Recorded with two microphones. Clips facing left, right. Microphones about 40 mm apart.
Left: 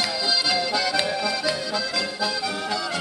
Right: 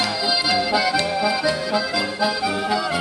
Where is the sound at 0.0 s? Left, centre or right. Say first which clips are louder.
Right 3 dB; centre.